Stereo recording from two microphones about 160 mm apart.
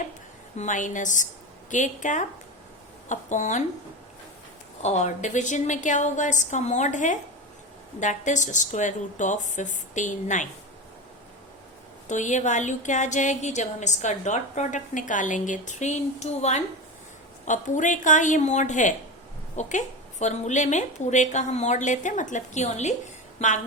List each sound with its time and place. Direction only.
0.5 s speech: 50° left (ahead or behind)
4.8 s speech: 45° left (ahead or behind)
12.0 s speech: 50° left (ahead or behind)